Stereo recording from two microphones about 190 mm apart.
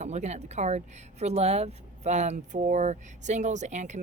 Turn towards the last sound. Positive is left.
turn(degrees=-40)  # may be behind; listen again after turning